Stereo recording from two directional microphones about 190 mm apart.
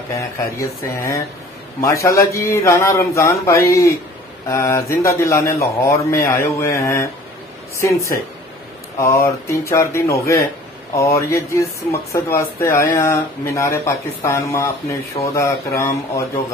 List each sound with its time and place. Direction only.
0.2 s speech: 15° left (ahead or behind)